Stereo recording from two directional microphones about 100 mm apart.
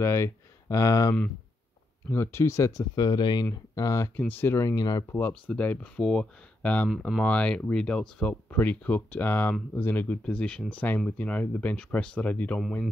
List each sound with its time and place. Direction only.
0.0 s speech: 30° left (ahead or behind)
2.0 s speech: 25° left (ahead or behind)
4.2 s speech: 20° left (ahead or behind)
4.7 s speech: 40° left (ahead or behind)
5.1 s speech: 20° left (ahead or behind)